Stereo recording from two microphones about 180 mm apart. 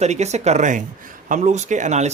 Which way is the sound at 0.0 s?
40° right (ahead or behind).